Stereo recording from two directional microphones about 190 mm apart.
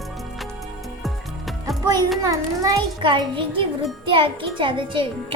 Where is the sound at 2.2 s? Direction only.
20° right (ahead or behind).